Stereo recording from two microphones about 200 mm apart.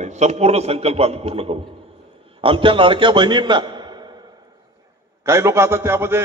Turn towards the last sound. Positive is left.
turn(degrees=-10)  # may be behind; listen again after turning